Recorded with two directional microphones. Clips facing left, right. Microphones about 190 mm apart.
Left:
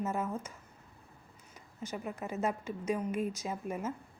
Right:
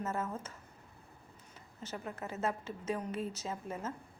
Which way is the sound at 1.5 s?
15° left (ahead or behind).